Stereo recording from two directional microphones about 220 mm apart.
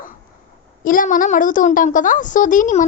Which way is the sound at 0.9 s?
40° left (ahead or behind).